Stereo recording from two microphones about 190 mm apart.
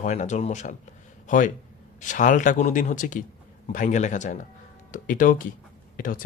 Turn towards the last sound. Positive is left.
turn(degrees=45)  # may be behind; listen again after turning